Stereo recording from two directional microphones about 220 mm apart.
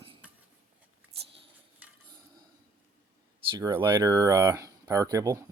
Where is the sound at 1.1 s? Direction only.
25° right (ahead or behind).